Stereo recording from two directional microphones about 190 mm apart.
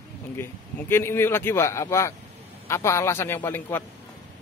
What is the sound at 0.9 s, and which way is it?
Speech, 10° left (ahead or behind).